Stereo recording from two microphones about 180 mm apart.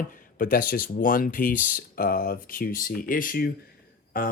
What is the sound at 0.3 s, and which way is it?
Speech, 50° left (ahead or behind).